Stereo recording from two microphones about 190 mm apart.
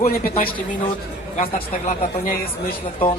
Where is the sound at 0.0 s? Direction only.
50° left (ahead or behind).